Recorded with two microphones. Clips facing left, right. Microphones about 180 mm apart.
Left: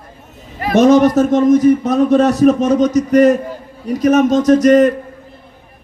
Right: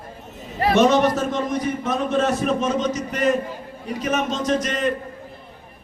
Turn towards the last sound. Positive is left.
turn(degrees=40)  # may be behind; listen again after turning